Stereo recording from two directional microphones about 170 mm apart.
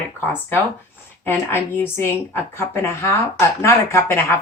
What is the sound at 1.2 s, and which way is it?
Speech, 15° left (ahead or behind).